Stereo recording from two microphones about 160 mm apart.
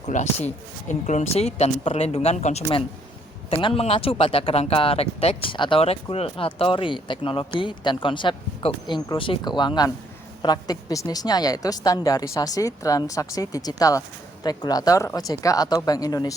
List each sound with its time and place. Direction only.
0.0 s speech: 45° left (ahead or behind)
3.5 s a woman's voice: 35° left (ahead or behind)